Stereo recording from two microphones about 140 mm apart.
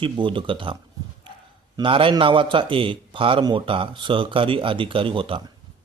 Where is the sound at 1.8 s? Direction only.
40° right (ahead or behind).